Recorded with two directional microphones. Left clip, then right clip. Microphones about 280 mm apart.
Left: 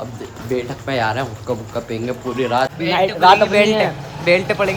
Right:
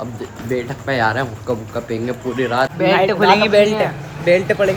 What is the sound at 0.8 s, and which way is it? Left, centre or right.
Speech, centre.